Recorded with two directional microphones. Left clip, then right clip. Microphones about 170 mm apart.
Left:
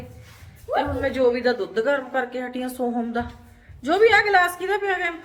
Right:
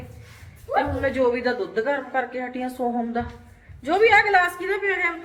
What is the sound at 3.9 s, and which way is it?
Speech, 15° left (ahead or behind).